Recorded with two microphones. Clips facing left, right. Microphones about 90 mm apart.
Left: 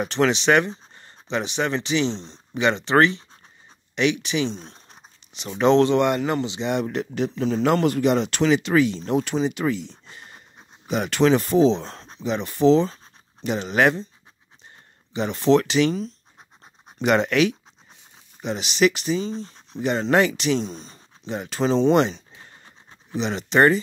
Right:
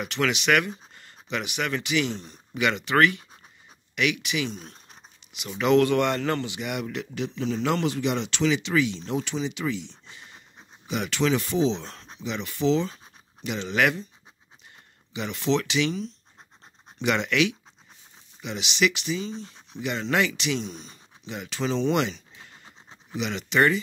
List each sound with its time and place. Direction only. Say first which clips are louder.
0.0 s speech: left 6 dB; 35° left (ahead or behind)
5.2 s a sound: left 1 dB; 40° left (ahead or behind)
5.6 s speech: left 3 dB; 30° left (ahead or behind)
15.1 s speech: left 7 dB; 35° left (ahead or behind)